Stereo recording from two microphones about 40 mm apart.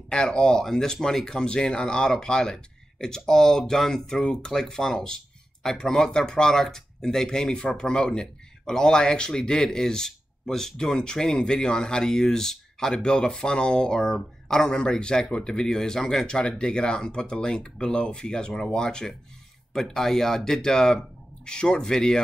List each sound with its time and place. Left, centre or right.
0.1 s speech: left
4.2 s speech: left
19.7 s speech: centre